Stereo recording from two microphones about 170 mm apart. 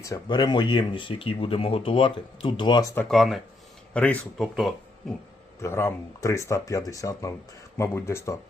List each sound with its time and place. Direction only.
0.0 s speech: 20° left (ahead or behind)
3.1 s speech: centre (ahead or behind)
5.5 s speech: 15° left (ahead or behind)